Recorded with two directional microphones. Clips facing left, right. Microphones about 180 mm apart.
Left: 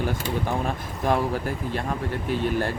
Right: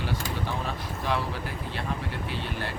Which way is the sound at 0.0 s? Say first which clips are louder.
Left 5 dB; 50° left (ahead or behind).